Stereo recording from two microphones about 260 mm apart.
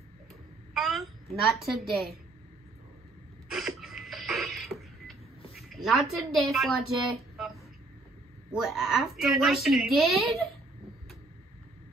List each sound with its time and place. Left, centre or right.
0.7 s a child's voice: centre
3.4 s a sound: centre
5.5 s a woman's voice: centre